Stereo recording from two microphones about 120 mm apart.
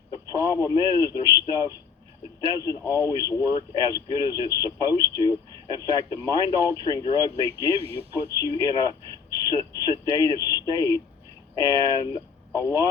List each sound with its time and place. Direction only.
0.1 s speech: 30° left (ahead or behind)